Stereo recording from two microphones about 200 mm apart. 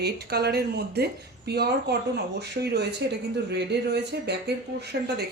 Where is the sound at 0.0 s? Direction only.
55° right (ahead or behind).